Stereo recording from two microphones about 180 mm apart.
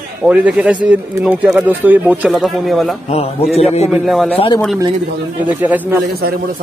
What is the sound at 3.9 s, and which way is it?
Speech, centre (ahead or behind).